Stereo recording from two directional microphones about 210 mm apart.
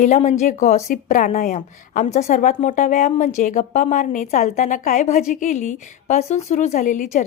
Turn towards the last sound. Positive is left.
turn(degrees=35)  # may be behind; listen again after turning